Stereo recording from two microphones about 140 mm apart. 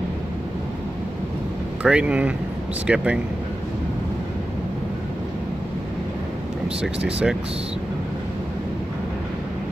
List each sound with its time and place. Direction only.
1.8 s speech: 10° right (ahead or behind)
6.8 s speech: 5° right (ahead or behind)